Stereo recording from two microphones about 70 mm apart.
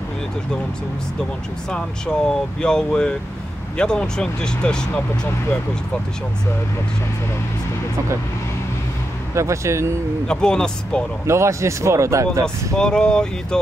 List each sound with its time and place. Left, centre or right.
1.7 s speech: centre
9.3 s speech: right
10.2 s speech: centre
11.2 s speech: right
12.7 s speech: centre